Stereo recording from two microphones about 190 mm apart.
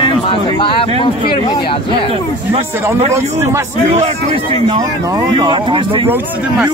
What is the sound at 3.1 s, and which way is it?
Speech, 15° right (ahead or behind).